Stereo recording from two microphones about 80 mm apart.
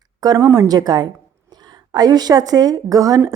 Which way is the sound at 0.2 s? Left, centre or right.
Right.